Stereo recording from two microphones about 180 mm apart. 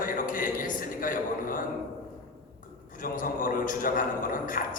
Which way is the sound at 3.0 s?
50° left (ahead or behind).